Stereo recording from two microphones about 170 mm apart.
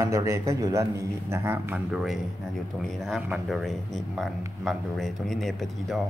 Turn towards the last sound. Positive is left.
turn(degrees=0)  # may be behind; listen again after turning